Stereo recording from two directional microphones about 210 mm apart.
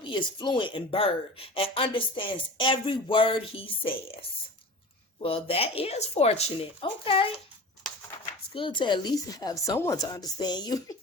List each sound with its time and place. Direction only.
0.0 s speech: 20° left (ahead or behind)
8.5 s speech: 25° left (ahead or behind)